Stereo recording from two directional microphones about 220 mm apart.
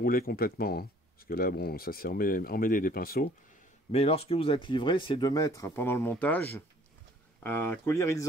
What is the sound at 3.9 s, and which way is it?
Speech, 30° left (ahead or behind).